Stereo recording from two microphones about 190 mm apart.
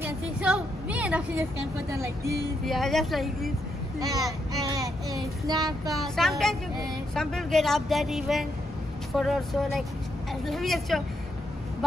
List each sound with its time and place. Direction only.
0.0 s a sound: 5° right (ahead or behind)
2.6 s speech: centre (ahead or behind)
4.0 s child singing: 20° right (ahead or behind)
5.9 s speech: centre (ahead or behind)